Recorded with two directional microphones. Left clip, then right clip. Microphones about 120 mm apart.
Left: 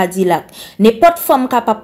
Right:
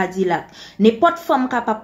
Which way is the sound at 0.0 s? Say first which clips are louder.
Left 6 dB; 20° left (ahead or behind).